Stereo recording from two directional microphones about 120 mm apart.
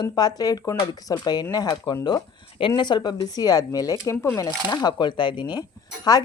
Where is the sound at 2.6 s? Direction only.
40° left (ahead or behind).